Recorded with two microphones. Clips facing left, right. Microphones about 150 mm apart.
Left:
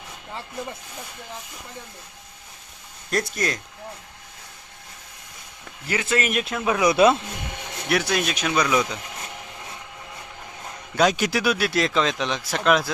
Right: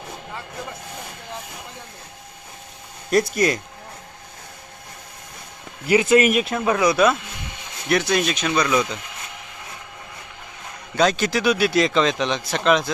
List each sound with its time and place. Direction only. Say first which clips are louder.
3.1 s speech: right 7 dB; 5° right (ahead or behind)
5.9 s speech: right 9 dB; 15° right (ahead or behind)
6.3 s speech: right 3 dB; centre (ahead or behind)
6.7 s speech: left 2 dB; 25° left (ahead or behind)
7.9 s speech: right 3 dB; 5° left (ahead or behind)
10.9 s speech: right 1 dB; 10° left (ahead or behind)